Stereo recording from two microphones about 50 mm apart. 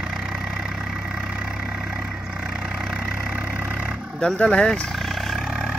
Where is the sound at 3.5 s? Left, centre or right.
Right.